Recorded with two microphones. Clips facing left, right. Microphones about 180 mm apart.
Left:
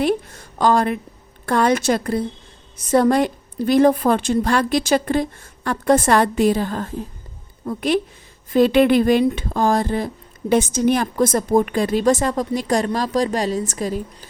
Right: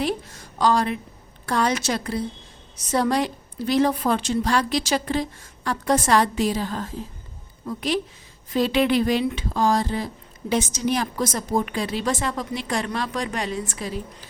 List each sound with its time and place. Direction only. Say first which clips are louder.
0.0 s a woman's voice: left 6 dB; 55° left (ahead or behind)